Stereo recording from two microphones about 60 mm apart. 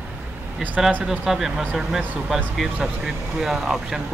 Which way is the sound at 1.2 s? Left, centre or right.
Centre.